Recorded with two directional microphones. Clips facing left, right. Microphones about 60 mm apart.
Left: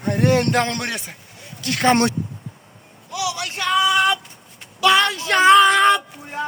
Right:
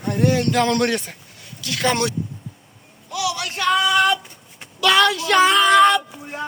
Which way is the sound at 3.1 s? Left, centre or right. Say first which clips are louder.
Right 1 dB; left.